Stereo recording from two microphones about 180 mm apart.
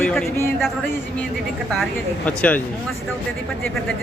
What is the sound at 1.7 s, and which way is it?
Speech, 5° left (ahead or behind).